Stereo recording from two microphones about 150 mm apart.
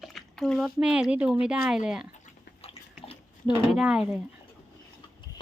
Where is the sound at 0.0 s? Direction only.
Centre (ahead or behind).